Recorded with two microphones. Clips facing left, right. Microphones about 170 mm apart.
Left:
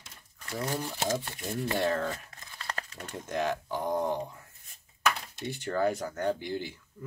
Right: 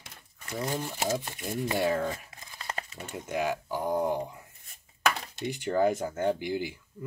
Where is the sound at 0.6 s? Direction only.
5° right (ahead or behind).